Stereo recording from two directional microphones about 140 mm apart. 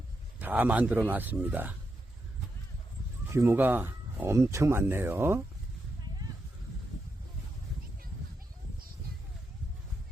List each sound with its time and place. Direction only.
0.3 s speech: 10° right (ahead or behind)
3.2 s speech: 20° right (ahead or behind)